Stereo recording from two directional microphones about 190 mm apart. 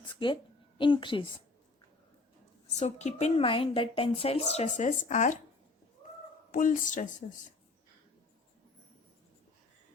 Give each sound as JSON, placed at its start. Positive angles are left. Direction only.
{"t": 0.2, "sound": "a woman's voice", "side_deg": 25}
{"t": 2.7, "sound": "a woman's voice", "side_deg": 35}
{"t": 6.5, "sound": "a woman's voice", "side_deg": 45}